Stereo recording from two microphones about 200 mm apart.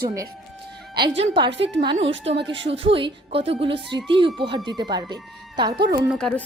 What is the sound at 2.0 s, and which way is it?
Speech, 65° right (ahead or behind).